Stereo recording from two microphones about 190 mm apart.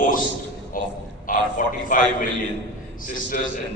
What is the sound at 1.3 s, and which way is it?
Speech, 45° left (ahead or behind).